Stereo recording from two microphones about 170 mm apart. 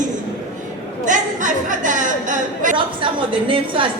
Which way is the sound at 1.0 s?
50° right (ahead or behind).